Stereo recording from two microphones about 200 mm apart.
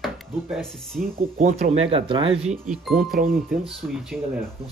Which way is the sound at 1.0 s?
35° right (ahead or behind).